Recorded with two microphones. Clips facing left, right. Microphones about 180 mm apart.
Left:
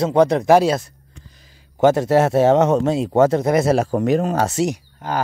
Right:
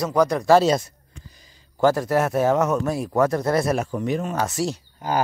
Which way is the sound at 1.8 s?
25° left (ahead or behind).